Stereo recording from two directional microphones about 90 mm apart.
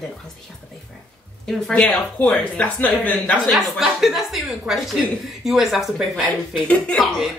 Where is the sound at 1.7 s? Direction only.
10° left (ahead or behind).